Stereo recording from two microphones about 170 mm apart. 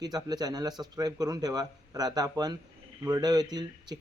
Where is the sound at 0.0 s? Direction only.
25° right (ahead or behind).